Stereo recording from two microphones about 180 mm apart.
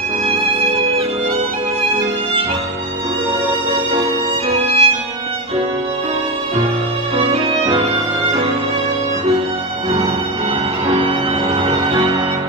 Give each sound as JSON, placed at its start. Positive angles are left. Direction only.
{"t": 4.5, "sound": "violin", "side_deg": -35}
{"t": 7.2, "sound": "music", "side_deg": -30}
{"t": 11.6, "sound": "music", "side_deg": -25}